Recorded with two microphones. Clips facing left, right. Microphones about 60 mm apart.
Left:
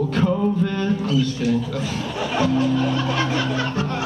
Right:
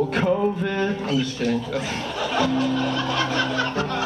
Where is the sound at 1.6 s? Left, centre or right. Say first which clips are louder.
Even; right.